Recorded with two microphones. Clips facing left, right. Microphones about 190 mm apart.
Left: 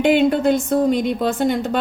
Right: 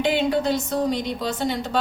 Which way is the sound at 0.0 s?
55° left (ahead or behind).